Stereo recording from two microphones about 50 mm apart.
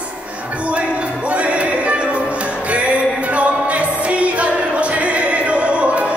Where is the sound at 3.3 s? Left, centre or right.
Right.